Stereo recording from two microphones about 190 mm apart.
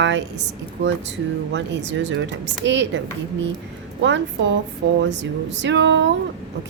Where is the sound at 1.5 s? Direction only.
70° right (ahead or behind).